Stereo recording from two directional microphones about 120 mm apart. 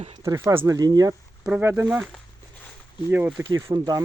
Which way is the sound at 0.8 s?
35° right (ahead or behind).